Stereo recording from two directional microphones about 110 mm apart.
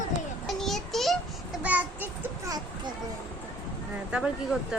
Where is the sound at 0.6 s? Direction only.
Centre (ahead or behind).